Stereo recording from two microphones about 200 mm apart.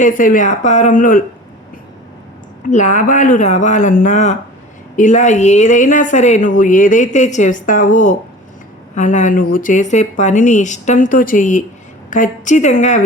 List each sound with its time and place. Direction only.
0.0 s speech: 40° left (ahead or behind)
2.6 s speech: 40° left (ahead or behind)